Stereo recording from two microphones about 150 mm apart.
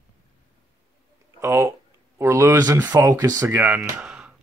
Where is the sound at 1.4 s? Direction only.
15° right (ahead or behind).